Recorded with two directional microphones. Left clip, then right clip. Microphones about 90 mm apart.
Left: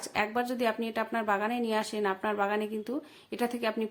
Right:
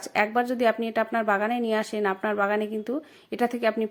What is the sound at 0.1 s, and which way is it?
A woman's voice, 45° right (ahead or behind).